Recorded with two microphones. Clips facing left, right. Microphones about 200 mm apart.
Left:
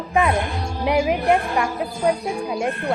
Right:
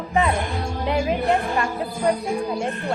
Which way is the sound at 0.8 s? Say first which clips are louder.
Left 3 dB; 15° left (ahead or behind).